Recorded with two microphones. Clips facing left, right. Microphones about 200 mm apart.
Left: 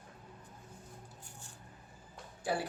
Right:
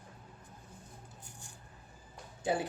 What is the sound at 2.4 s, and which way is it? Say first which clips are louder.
Speech: right 3 dB; 20° right (ahead or behind).